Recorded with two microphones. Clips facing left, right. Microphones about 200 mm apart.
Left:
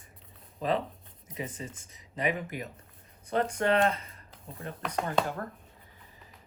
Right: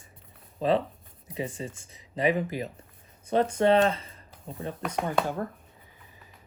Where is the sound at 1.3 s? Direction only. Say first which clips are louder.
Right 5 dB; 30° right (ahead or behind).